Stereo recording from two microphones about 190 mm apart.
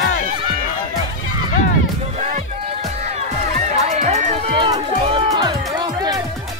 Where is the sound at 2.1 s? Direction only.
35° right (ahead or behind).